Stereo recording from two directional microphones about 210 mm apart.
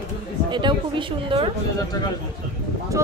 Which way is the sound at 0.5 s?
25° right (ahead or behind).